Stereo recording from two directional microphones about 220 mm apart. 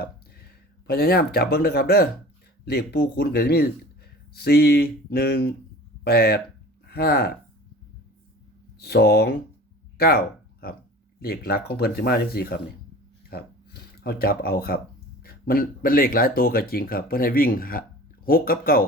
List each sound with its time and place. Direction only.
0.9 s speech: 45° left (ahead or behind)
8.8 s speech: 45° left (ahead or behind)